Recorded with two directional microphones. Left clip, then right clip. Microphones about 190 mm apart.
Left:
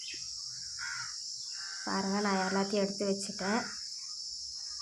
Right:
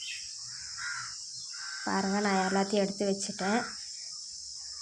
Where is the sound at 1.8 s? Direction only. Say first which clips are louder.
Right 3 dB; 15° right (ahead or behind).